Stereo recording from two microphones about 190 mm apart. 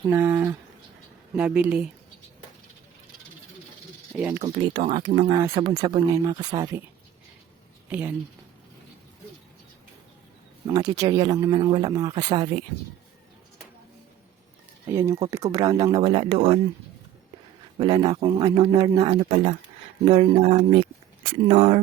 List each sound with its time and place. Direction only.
0.1 s speech: 10° right (ahead or behind)
4.1 s speech: 5° right (ahead or behind)
4.4 s a man's voice: 25° right (ahead or behind)
7.9 s speech: 10° right (ahead or behind)
10.7 s a man's voice: 20° right (ahead or behind)
14.8 s a man's voice: 15° right (ahead or behind)
17.7 s a man's voice: 20° right (ahead or behind)